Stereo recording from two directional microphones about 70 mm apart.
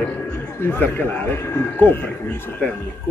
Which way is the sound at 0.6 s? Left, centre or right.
Left.